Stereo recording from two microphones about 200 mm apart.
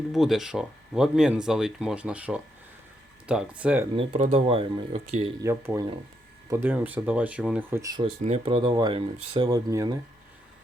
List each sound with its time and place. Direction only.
0.1 s speech: centre (ahead or behind)
3.9 s speech: 30° right (ahead or behind)
5.4 s speech: 15° right (ahead or behind)
7.8 s speech: 20° right (ahead or behind)
8.2 s speech: 30° right (ahead or behind)